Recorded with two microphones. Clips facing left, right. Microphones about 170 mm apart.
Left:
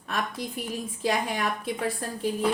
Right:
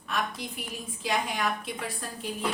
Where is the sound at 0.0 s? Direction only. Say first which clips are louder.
Left 1 dB; 50° left (ahead or behind).